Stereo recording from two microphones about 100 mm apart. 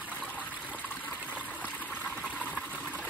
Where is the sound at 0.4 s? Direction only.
15° right (ahead or behind).